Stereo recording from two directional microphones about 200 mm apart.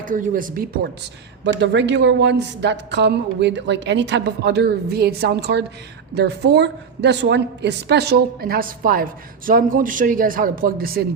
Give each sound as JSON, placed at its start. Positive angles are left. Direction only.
{"t": 0.0, "sound": "a man's voice", "side_deg": -40}
{"t": 1.5, "sound": "a woman's voice", "side_deg": -60}